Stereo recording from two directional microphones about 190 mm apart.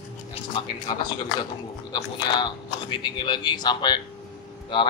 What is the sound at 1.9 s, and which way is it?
Speech, 25° left (ahead or behind).